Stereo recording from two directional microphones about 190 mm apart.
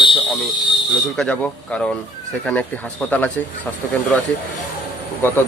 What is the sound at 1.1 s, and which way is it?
Speech, 5° left (ahead or behind).